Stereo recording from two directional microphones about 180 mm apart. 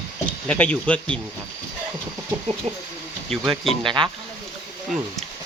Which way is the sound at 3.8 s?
25° right (ahead or behind).